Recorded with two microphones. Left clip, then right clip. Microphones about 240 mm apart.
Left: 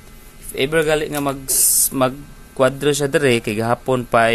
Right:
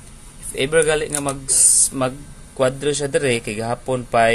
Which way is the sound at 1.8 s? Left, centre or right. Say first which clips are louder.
Left 4 dB; centre.